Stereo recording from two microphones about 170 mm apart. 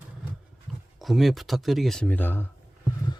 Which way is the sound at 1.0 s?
Centre (ahead or behind).